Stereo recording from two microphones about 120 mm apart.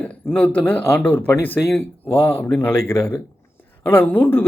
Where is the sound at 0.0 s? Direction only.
15° left (ahead or behind).